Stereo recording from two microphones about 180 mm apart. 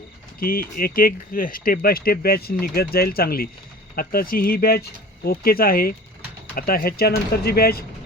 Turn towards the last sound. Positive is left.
turn(degrees=60)  # may be behind; listen again after turning